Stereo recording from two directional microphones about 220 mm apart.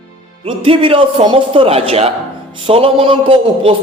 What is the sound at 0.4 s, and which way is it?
A man's voice, 25° right (ahead or behind).